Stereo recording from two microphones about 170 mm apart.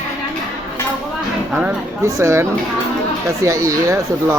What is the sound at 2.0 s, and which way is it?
Speech, 15° right (ahead or behind).